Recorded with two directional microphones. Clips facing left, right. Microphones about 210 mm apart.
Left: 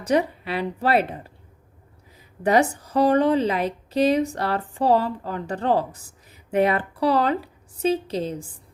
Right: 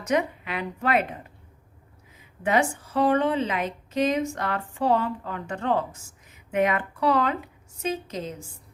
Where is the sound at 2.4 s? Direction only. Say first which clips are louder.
Left 4 dB; 40° left (ahead or behind).